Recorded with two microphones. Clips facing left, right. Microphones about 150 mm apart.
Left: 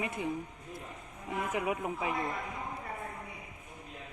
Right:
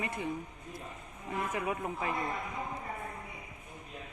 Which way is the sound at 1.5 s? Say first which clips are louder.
Left 2 dB; 15° left (ahead or behind).